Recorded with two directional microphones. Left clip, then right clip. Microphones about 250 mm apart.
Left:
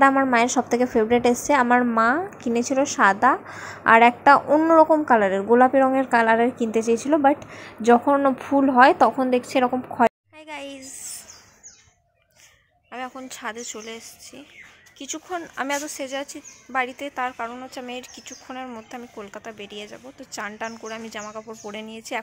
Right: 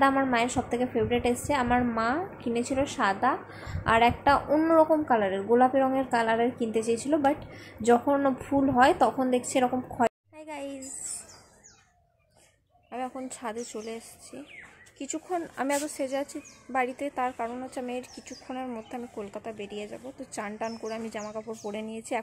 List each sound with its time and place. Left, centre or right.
0.0 s a woman's voice: centre
10.5 s a sound: centre
13.3 s speech: centre